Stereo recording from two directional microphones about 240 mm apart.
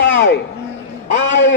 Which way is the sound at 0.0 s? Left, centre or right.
Left.